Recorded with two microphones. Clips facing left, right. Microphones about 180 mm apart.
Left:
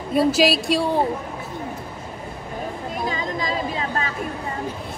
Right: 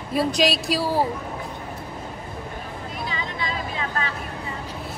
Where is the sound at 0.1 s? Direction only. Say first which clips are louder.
Left 4 dB; centre (ahead or behind).